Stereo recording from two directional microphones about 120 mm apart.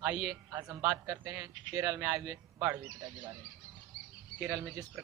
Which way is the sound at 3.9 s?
10° left (ahead or behind).